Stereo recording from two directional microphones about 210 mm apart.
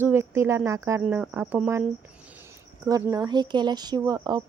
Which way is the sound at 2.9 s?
15° right (ahead or behind).